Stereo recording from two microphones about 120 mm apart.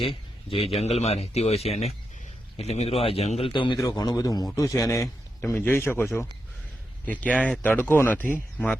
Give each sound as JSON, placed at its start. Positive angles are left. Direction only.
{"t": 0.0, "sound": "speech", "side_deg": 50}
{"t": 3.5, "sound": "a man's voice", "side_deg": 40}
{"t": 3.8, "sound": "a man's voice", "side_deg": 30}